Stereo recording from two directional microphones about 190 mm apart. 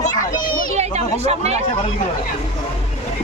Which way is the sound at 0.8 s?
35° right (ahead or behind).